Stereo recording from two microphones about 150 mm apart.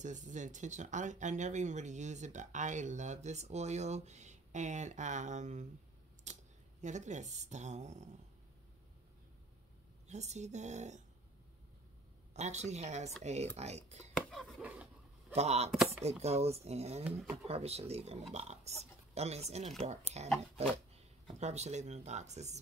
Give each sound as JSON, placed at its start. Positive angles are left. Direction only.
{"t": 0.0, "sound": "speech", "side_deg": -55}
{"t": 6.3, "sound": "a sound", "side_deg": -50}
{"t": 6.8, "sound": "speech", "side_deg": -50}
{"t": 10.0, "sound": "speech", "side_deg": -50}
{"t": 12.4, "sound": "speech", "side_deg": -50}
{"t": 14.6, "sound": "a sound", "side_deg": -10}
{"t": 15.3, "sound": "speech", "side_deg": -45}
{"t": 15.7, "sound": "speech", "side_deg": 0}
{"t": 16.0, "sound": "speech", "side_deg": -45}